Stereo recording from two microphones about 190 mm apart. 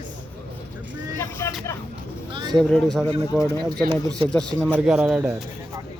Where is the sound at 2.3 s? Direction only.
25° right (ahead or behind).